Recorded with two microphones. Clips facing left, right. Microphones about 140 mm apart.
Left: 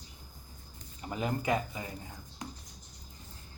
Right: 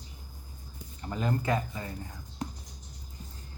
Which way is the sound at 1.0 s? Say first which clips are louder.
Right 1 dB; 10° left (ahead or behind).